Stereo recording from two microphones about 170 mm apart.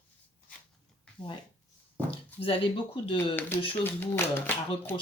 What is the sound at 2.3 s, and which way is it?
Speech, 35° left (ahead or behind).